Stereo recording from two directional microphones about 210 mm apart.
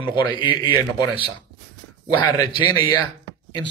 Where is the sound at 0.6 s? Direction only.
20° left (ahead or behind).